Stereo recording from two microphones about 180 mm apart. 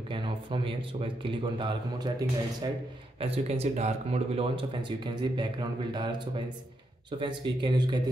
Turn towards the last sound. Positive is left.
turn(degrees=-25)  # may be behind; listen again after turning